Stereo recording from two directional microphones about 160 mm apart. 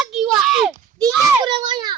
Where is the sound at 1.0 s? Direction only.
25° right (ahead or behind).